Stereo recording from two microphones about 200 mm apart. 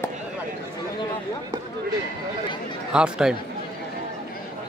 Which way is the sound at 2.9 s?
5° right (ahead or behind).